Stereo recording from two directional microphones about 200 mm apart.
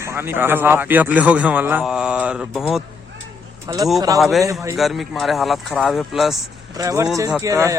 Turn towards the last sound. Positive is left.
turn(degrees=-15)  # may be behind; listen again after turning